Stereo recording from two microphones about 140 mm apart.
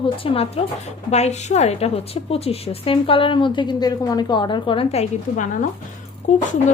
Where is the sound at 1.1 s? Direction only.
55° left (ahead or behind).